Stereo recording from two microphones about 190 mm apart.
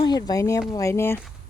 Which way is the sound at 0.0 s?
20° left (ahead or behind).